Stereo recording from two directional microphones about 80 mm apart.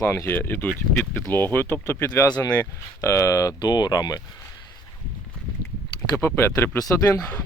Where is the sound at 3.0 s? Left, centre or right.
Left.